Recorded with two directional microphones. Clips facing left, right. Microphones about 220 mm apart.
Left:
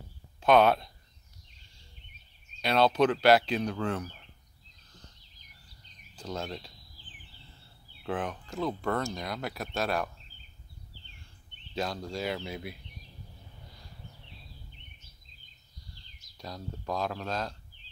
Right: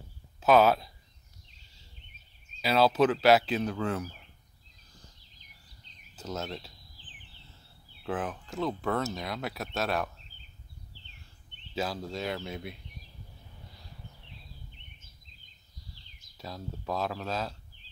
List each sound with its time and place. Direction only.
0.4 s speech: 5° right (ahead or behind)
2.6 s speech: 5° right (ahead or behind)
6.1 s speech: 5° right (ahead or behind)
8.0 s speech: 5° right (ahead or behind)
11.7 s speech: 5° right (ahead or behind)
16.3 s speech: centre (ahead or behind)